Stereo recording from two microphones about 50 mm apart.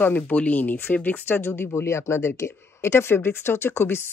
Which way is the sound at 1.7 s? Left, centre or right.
Left.